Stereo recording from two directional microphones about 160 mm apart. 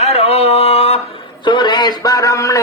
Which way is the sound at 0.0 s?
40° left (ahead or behind).